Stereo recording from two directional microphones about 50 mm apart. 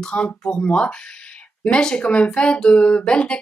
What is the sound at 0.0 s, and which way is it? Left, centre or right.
Speech, centre.